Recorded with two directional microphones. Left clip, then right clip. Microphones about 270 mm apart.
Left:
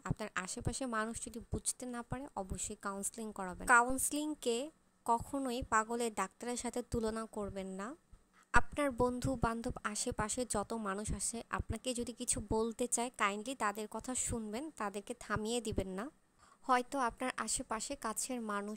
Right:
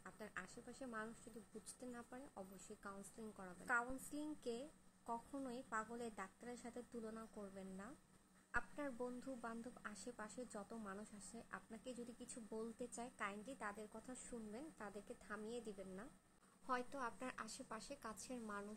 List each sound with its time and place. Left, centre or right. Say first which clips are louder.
0.0 s a woman's voice: left 13 dB; left